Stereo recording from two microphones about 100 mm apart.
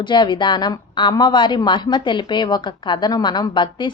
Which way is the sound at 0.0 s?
50° left (ahead or behind).